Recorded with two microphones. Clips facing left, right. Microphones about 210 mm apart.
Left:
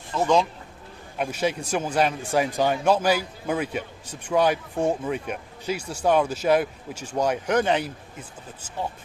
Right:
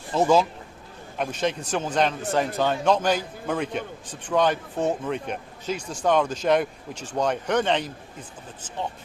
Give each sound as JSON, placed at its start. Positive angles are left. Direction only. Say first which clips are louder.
{"t": 0.1, "sound": "speech", "louder": "right 3 dB", "side_deg": -35}
{"t": 1.2, "sound": "speech", "louder": "left 1 dB", "side_deg": 10}